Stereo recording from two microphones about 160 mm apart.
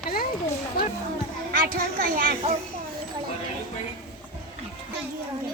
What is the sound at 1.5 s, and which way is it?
Speech, 65° right (ahead or behind).